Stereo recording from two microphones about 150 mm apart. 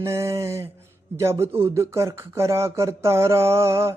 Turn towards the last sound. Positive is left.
turn(degrees=-20)  # may be behind; listen again after turning